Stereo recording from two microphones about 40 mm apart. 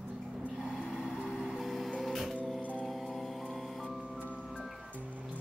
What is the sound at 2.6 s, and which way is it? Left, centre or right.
Music, left.